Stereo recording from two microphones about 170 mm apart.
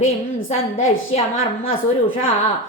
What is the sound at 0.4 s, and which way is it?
Speech, 35° left (ahead or behind).